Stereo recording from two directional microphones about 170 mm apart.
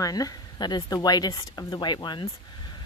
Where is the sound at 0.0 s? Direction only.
20° left (ahead or behind).